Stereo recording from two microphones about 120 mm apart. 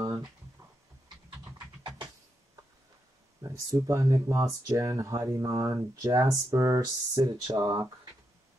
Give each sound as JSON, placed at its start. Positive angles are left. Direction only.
{"t": 3.4, "sound": "speech", "side_deg": -30}